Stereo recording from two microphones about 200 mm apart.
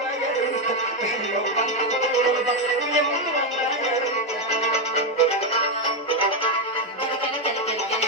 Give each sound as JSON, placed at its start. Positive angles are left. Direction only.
{"t": 4.7, "sound": "music", "side_deg": 30}